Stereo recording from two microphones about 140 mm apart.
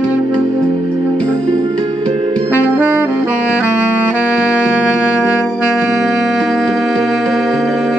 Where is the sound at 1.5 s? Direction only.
35° right (ahead or behind).